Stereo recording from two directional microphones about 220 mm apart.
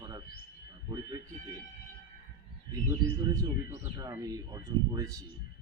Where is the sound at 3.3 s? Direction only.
15° right (ahead or behind).